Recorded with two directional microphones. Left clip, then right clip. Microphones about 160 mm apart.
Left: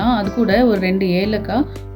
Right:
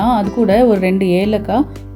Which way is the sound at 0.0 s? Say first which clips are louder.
Right 4 dB; 20° right (ahead or behind).